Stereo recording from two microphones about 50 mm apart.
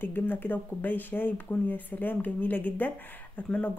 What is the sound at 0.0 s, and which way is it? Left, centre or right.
Speech, left.